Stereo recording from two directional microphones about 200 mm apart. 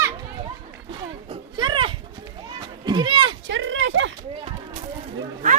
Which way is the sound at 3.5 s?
70° right (ahead or behind).